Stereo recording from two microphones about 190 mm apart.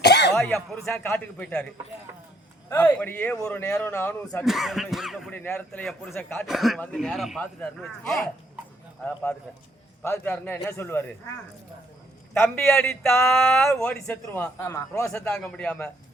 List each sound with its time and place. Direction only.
0.0 s a sound: 60° left (ahead or behind)
0.3 s speech: centre (ahead or behind)
2.6 s speech: 10° left (ahead or behind)
4.4 s speech: centre (ahead or behind)
10.0 s speech: 10° left (ahead or behind)
12.3 s speech: 10° left (ahead or behind)